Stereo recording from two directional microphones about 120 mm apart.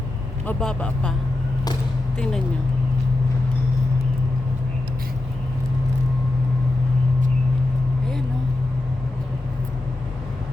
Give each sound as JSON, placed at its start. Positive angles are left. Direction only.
{"t": 0.4, "sound": "speech", "side_deg": 10}
{"t": 2.1, "sound": "speech", "side_deg": 5}